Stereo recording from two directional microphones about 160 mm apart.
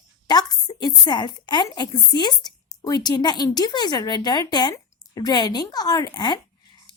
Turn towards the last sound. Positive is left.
turn(degrees=25)  # may be behind; listen again after turning